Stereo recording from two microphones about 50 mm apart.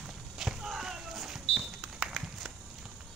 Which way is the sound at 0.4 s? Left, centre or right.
Centre.